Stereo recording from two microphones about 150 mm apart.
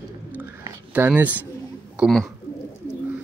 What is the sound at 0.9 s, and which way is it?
Speech, 10° right (ahead or behind).